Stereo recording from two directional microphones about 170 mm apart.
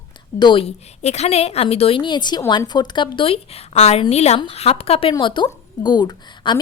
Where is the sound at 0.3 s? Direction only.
30° left (ahead or behind).